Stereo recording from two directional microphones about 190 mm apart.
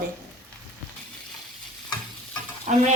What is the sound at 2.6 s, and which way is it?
Stir, 35° right (ahead or behind).